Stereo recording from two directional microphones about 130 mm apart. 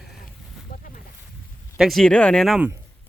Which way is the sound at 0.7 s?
90° left.